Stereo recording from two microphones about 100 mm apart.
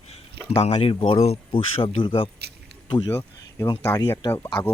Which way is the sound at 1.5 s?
60° left (ahead or behind).